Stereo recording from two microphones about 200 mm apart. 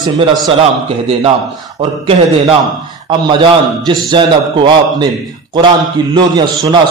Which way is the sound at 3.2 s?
20° right (ahead or behind).